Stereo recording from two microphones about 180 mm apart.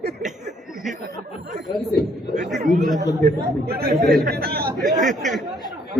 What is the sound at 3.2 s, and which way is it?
Speech, 60° right (ahead or behind).